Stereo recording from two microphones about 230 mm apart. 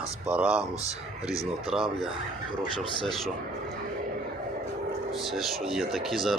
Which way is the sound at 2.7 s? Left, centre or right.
Left.